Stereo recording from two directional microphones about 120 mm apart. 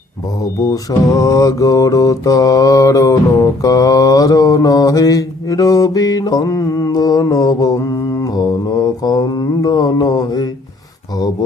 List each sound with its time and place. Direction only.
0.6 s mantra: 30° left (ahead or behind)